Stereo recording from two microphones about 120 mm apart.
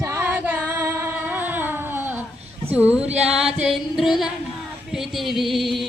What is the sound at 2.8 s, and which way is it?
Music, 10° right (ahead or behind).